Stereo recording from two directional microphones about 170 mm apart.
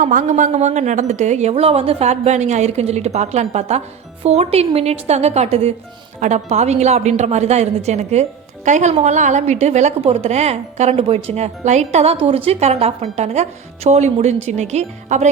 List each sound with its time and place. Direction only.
0.0 s a woman's voice: 45° right (ahead or behind)